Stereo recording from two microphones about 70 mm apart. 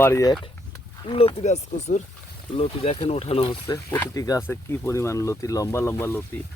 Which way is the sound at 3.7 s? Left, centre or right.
Left.